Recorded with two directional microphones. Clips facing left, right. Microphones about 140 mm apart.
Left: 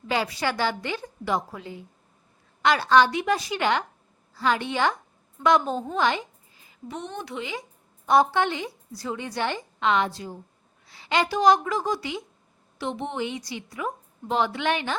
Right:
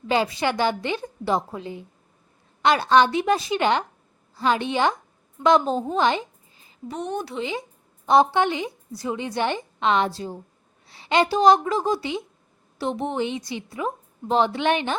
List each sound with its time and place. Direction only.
0.1 s a woman's voice: 25° right (ahead or behind)
6.7 s a woman's voice: 40° right (ahead or behind)
12.8 s a woman's voice: 40° right (ahead or behind)
13.2 s a woman's voice: 20° right (ahead or behind)